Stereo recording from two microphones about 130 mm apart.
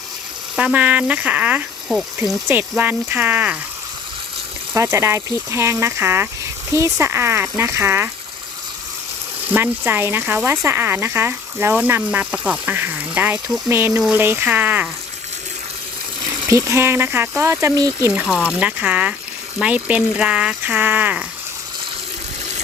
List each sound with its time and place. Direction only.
0.5 s speech: 10° right (ahead or behind)
1.9 s speech: centre (ahead or behind)
2.5 s speech: 15° right (ahead or behind)
4.7 s speech: 20° right (ahead or behind)
9.5 s speech: 15° right (ahead or behind)
16.5 s speech: 20° right (ahead or behind)
18.1 s speech: 5° right (ahead or behind)